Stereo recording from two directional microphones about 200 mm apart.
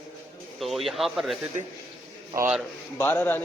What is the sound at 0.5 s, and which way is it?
A man's voice, centre (ahead or behind).